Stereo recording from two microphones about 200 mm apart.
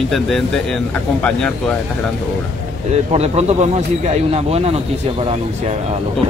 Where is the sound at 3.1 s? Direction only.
30° right (ahead or behind).